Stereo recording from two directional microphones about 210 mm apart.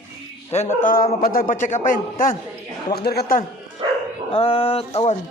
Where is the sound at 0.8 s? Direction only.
40° left (ahead or behind).